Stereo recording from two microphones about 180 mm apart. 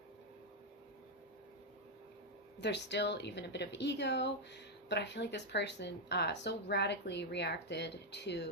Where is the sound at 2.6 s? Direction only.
70° left (ahead or behind).